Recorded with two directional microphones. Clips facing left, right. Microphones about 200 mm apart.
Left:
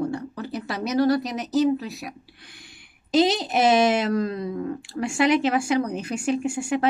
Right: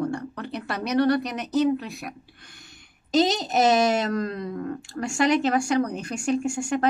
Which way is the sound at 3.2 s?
45° right (ahead or behind).